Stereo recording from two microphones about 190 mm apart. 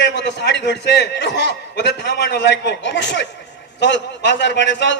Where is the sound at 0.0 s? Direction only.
65° left (ahead or behind).